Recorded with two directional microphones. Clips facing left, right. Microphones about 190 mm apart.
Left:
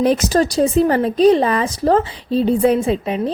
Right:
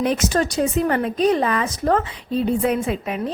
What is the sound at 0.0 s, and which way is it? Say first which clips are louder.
Speech: left 5 dB; 35° left (ahead or behind).